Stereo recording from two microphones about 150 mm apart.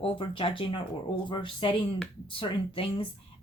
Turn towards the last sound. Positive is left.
turn(degrees=35)  # may be behind; listen again after turning